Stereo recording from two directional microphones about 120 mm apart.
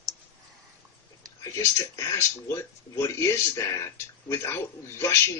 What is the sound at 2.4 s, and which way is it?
Speech, 25° left (ahead or behind).